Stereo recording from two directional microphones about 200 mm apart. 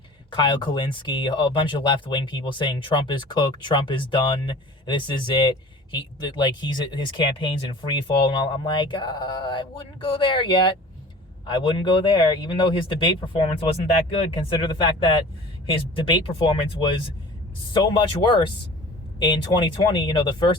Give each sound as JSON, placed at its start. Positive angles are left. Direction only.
{"t": 0.3, "sound": "speech", "side_deg": 25}
{"t": 17.9, "sound": "speech", "side_deg": 25}